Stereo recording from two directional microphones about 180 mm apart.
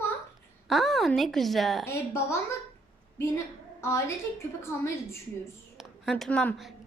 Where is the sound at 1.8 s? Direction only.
15° left (ahead or behind).